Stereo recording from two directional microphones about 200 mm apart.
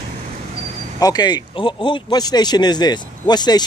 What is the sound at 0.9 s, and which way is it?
Speech, 20° left (ahead or behind).